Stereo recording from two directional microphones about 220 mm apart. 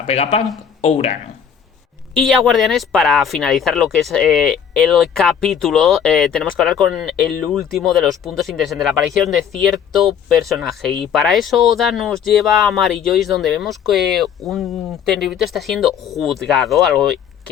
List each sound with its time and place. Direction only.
0.0 s speech: 30° left (ahead or behind)
2.1 s speech: centre (ahead or behind)